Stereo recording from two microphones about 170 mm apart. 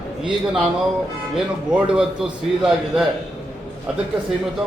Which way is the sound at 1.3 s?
5° right (ahead or behind).